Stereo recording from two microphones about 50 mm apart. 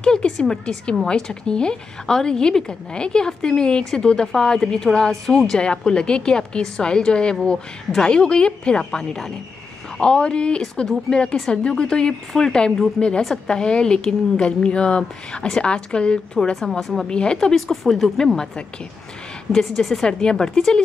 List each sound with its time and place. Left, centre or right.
0.0 s a woman's voice: centre
16.8 s a woman's voice: centre
17.1 s a woman's voice: centre
17.6 s a woman's voice: centre
19.6 s a woman's voice: centre